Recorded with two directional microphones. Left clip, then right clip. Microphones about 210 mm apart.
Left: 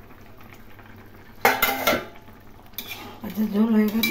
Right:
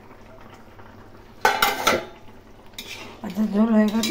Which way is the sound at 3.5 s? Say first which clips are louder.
Right 2 dB; 5° left (ahead or behind).